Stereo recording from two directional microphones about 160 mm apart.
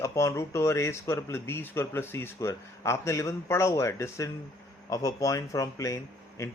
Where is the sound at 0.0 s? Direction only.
20° left (ahead or behind).